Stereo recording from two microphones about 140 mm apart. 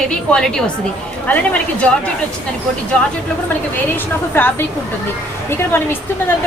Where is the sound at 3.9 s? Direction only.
15° left (ahead or behind).